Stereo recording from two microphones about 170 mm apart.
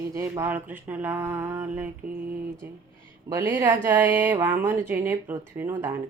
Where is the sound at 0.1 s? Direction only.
15° right (ahead or behind).